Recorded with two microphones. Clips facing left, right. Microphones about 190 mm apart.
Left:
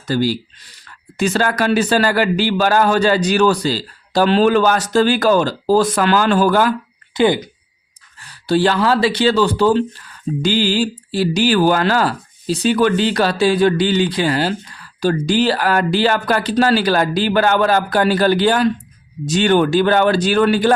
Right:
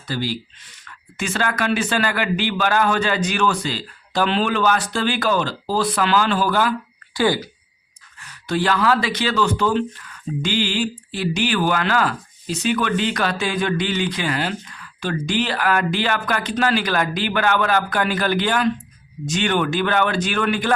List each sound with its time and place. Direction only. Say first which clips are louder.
0.1 s speech: left 8 dB; 40° left (ahead or behind)
7.1 s speech: left 5 dB; 20° left (ahead or behind)
8.2 s speech: left 7 dB; 30° left (ahead or behind)